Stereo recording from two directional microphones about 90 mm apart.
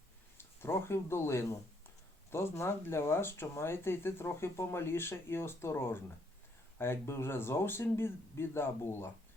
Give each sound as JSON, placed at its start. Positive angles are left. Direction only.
{"t": 0.3, "sound": "speech", "side_deg": 25}